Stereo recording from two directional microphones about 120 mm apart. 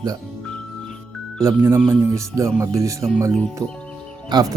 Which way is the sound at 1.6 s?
20° right (ahead or behind).